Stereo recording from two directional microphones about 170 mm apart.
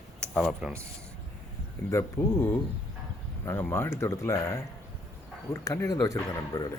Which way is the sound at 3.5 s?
15° left (ahead or behind).